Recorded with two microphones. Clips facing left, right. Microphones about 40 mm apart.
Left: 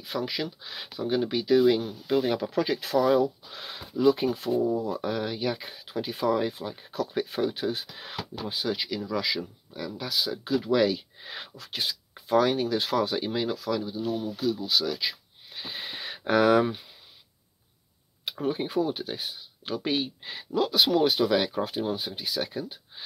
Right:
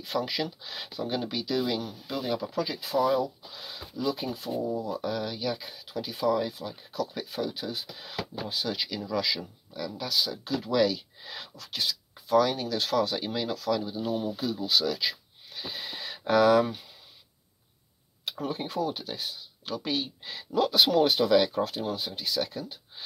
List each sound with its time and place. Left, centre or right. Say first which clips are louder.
0.0 s speech: right 1 dB; centre
1.3 s speech: left 11 dB; left
8.5 s speech: left 4 dB; centre
13.9 s speech: even; centre
15.5 s a sound: left 1 dB; left
18.2 s speech: left 4 dB; left
20.5 s speech: even; centre